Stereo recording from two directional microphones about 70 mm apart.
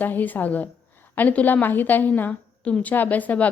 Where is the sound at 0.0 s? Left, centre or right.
Left.